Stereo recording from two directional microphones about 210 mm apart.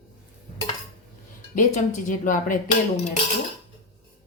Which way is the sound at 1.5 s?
35° left (ahead or behind).